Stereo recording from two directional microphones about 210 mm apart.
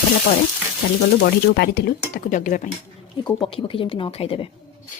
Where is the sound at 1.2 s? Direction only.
50° left (ahead or behind).